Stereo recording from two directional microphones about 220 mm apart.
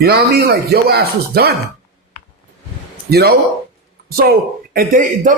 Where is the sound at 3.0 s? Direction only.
45° right (ahead or behind).